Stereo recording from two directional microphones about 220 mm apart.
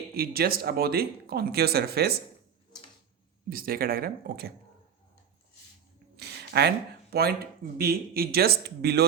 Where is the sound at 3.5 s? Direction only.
40° right (ahead or behind).